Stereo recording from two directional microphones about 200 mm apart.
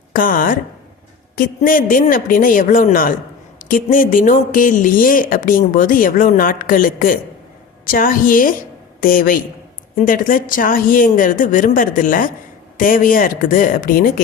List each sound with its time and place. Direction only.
0.1 s a woman's voice: 45° left (ahead or behind)